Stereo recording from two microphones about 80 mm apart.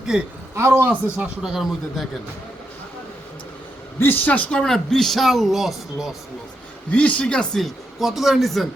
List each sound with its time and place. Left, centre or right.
0.0 s a man's voice: centre
0.5 s speech: right
0.9 s speech: centre
1.4 s speech: centre
4.0 s speech: left; by 6.1 s centre
6.9 s speech: centre
7.6 s speech: centre